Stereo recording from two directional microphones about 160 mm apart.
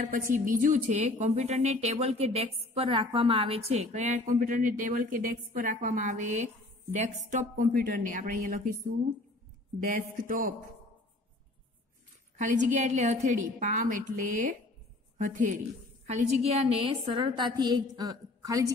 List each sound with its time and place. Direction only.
0.0 s a woman's voice: 55° right (ahead or behind)
4.4 s a woman's voice: 55° right (ahead or behind)
10.1 s speech: 60° right (ahead or behind)
12.7 s a woman's voice: 45° right (ahead or behind)
16.1 s a woman's voice: 40° right (ahead or behind); by 18.7 s 20° right (ahead or behind)